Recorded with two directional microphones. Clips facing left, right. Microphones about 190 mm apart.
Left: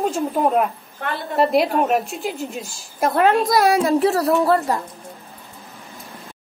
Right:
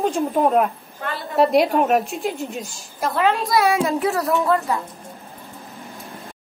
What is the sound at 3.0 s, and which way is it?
Speech, 50° left (ahead or behind).